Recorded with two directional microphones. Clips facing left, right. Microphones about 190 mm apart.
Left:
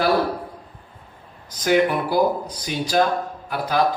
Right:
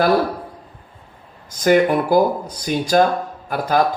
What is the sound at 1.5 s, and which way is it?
Speech, 50° right (ahead or behind).